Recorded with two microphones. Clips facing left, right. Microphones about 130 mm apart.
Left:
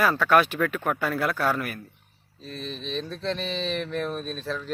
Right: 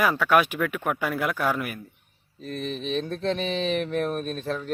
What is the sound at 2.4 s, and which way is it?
Speech, 60° right (ahead or behind).